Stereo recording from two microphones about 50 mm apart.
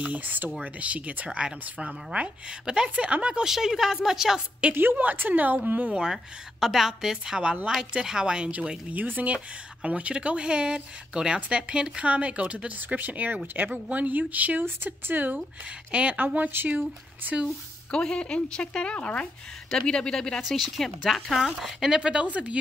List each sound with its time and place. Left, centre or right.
0.1 s speech: right
3.4 s a woman's voice: centre
4.6 s speech: right
4.9 s speech: right
5.9 s a woman's voice: centre
6.6 s a woman's voice: centre
8.9 s speech: right
12.6 s speech: right
15.9 s speech: right
16.3 s speech: right
17.9 s a woman's voice: centre
19.7 s speech: centre
20.4 s speech: centre
22.0 s speech: right